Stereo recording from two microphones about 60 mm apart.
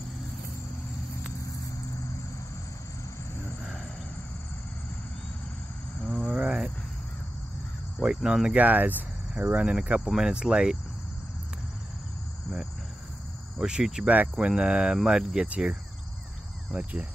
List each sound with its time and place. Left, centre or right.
6.1 s cricket: centre
8.0 s speech: centre
8.5 s cricket: right
9.4 s speech: centre
13.6 s speech: centre
16.7 s cricket: right